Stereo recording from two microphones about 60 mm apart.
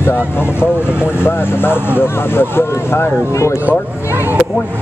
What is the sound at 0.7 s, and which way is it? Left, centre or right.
Speech, left.